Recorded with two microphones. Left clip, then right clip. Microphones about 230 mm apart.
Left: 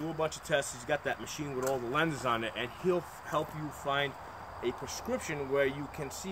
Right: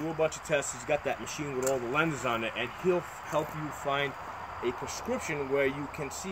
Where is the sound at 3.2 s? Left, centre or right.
Centre.